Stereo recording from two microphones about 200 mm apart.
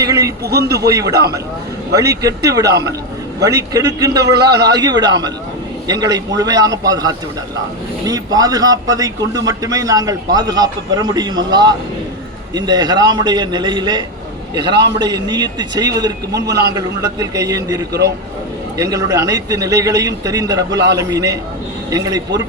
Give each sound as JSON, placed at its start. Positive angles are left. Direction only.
{"t": 0.0, "sound": "a sound", "side_deg": -15}
{"t": 0.4, "sound": "a man's voice", "side_deg": -50}
{"t": 0.8, "sound": "a man's voice", "side_deg": -20}
{"t": 20.7, "sound": "a man's voice", "side_deg": -60}
{"t": 20.9, "sound": "a man's voice", "side_deg": -15}